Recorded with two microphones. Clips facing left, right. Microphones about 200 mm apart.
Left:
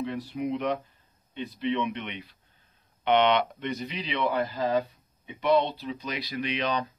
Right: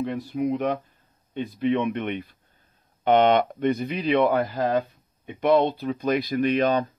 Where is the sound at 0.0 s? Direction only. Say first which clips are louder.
Right 5 dB; 45° right (ahead or behind).